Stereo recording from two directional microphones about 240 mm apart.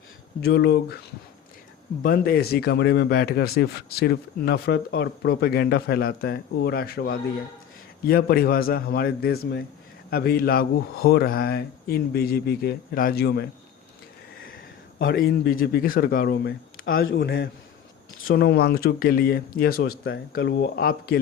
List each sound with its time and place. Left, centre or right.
0.4 s speech: left
2.0 s a man's voice: left